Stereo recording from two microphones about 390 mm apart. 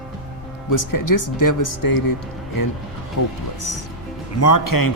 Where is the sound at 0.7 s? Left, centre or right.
Left.